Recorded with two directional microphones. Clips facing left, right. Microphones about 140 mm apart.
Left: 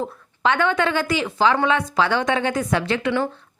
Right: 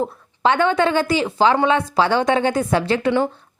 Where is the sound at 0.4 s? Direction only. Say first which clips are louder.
Right 3 dB; 30° right (ahead or behind).